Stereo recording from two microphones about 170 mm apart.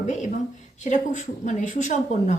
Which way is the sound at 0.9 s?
45° left (ahead or behind).